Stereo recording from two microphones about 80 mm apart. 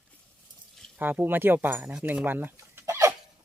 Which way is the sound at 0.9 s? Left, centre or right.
Right.